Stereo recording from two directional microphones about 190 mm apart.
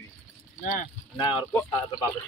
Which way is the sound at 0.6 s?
45° left (ahead or behind).